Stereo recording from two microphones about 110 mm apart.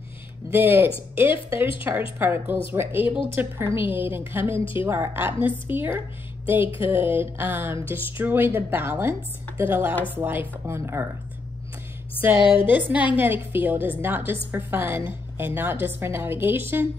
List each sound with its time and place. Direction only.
0.5 s a woman's voice: 20° right (ahead or behind)
12.2 s a woman's voice: 15° right (ahead or behind)